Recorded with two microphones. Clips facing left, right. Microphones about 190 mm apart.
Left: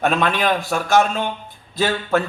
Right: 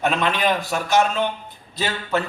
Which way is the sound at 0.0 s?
50° left (ahead or behind).